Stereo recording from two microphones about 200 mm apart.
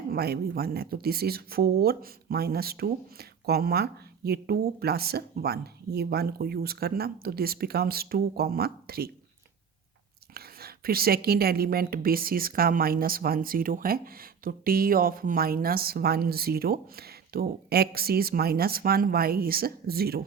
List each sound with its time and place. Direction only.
0.1 s a woman's voice: 50° right (ahead or behind)
10.3 s a woman's voice: 50° right (ahead or behind)